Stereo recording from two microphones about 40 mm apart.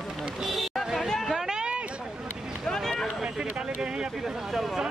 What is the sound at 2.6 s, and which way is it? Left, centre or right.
Run, centre.